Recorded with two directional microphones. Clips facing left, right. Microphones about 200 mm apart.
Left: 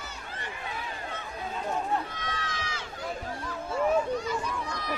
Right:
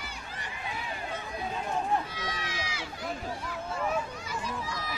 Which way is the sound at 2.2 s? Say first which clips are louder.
Even; 10° right (ahead or behind).